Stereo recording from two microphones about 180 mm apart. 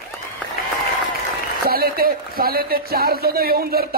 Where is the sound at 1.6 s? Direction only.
55° right (ahead or behind).